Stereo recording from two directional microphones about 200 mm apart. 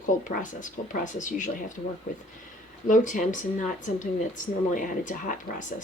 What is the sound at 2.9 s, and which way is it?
A woman's voice, 40° left (ahead or behind).